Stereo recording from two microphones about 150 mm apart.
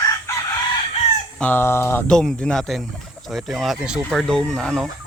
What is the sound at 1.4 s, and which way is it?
Fowl, 15° left (ahead or behind).